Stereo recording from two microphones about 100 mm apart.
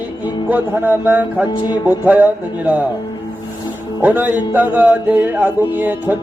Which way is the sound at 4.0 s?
20° right (ahead or behind).